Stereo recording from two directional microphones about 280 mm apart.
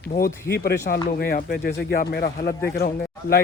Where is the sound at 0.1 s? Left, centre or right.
Left.